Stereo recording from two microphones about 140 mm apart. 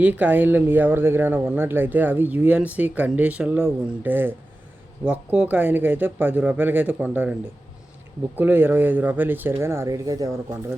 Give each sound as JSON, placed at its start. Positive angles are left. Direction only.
{"t": 0.0, "sound": "speech", "side_deg": -10}
{"t": 8.4, "sound": "speech", "side_deg": -15}